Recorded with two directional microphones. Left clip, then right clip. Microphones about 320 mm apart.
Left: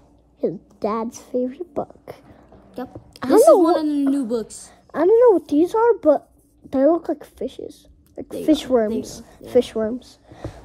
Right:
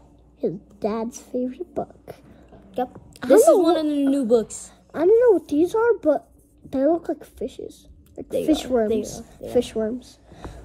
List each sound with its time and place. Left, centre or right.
0.4 s a woman's voice: left
3.3 s a woman's voice: centre
4.6 s a woman's voice: left